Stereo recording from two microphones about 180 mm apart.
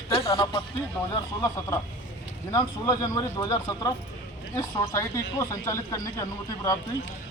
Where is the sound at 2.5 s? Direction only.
20° left (ahead or behind).